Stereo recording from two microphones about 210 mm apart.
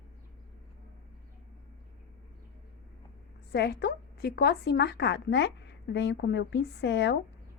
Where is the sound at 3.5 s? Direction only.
50° left (ahead or behind).